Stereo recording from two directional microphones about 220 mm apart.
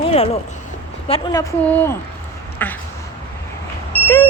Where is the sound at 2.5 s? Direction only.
10° left (ahead or behind).